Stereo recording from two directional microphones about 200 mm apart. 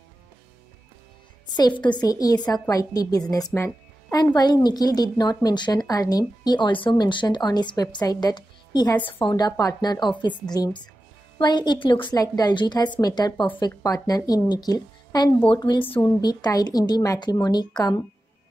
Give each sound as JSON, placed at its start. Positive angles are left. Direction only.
{"t": 1.8, "sound": "a woman's voice", "side_deg": 20}
{"t": 15.8, "sound": "speech", "side_deg": 10}
{"t": 16.2, "sound": "a woman's voice", "side_deg": 20}